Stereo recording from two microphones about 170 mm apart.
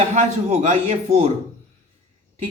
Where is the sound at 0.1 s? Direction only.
40° right (ahead or behind).